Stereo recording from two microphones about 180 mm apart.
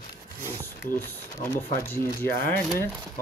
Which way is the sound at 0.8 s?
10° left (ahead or behind).